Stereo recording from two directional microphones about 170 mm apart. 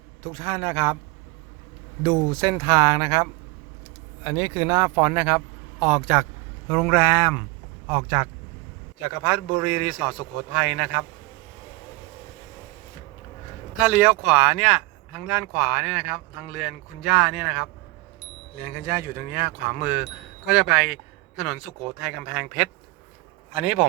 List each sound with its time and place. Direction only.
0.3 s speech: 20° right (ahead or behind)
2.0 s speech: 15° right (ahead or behind)
13.7 s speech: 5° right (ahead or behind)
19.1 s speech: 60° right (ahead or behind)
20.0 s speech: 5° right (ahead or behind)